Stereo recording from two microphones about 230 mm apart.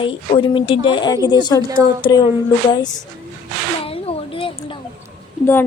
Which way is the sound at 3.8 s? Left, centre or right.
Left.